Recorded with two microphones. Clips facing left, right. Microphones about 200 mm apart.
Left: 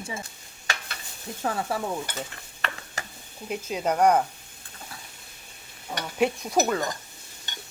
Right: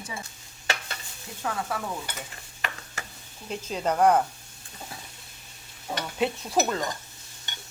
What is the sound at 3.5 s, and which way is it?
Speech, 10° left (ahead or behind).